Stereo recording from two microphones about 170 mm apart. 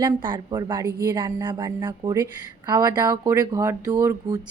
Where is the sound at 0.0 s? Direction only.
25° right (ahead or behind).